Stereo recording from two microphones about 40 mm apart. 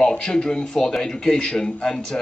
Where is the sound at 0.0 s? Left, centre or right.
Centre.